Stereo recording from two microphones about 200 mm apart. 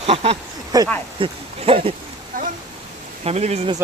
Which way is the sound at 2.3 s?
45° right (ahead or behind).